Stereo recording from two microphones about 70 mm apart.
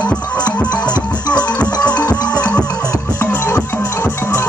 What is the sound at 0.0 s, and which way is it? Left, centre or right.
Music, centre.